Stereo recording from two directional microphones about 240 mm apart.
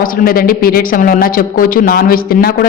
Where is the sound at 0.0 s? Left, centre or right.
Left.